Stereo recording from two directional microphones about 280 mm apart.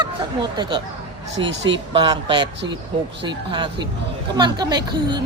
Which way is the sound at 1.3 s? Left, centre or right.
Right.